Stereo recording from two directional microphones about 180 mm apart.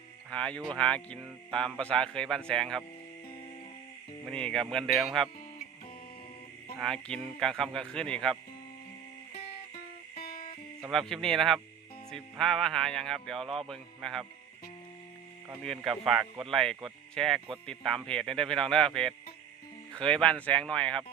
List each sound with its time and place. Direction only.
0.3 s speech: 5° left (ahead or behind)
4.3 s speech: 5° left (ahead or behind)
6.7 s speech: 5° left (ahead or behind)
10.2 s music: 55° left (ahead or behind)
10.9 s speech: 5° left (ahead or behind)
15.6 s speech: centre (ahead or behind)